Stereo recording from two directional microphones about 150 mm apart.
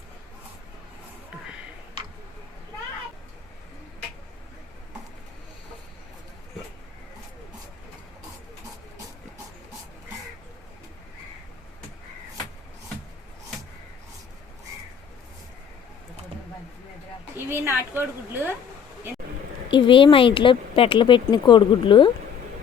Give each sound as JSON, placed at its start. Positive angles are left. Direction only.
{"t": 17.3, "sound": "a woman's voice", "side_deg": -15}
{"t": 19.7, "sound": "speech", "side_deg": 35}